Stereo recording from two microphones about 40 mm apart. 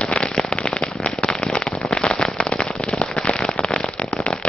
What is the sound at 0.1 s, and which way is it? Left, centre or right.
Firecracker, left.